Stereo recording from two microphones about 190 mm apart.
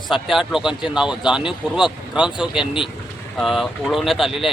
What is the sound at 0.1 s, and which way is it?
Speech, centre (ahead or behind).